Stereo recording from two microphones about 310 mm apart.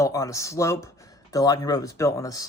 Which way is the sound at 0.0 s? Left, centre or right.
Centre.